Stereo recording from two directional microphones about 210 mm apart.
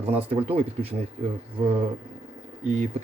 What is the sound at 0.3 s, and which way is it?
Speech, 30° right (ahead or behind).